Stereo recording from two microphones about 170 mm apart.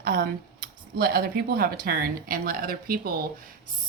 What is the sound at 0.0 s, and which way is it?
Speech, 60° right (ahead or behind).